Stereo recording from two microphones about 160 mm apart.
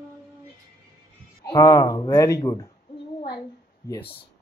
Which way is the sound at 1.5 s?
20° left (ahead or behind).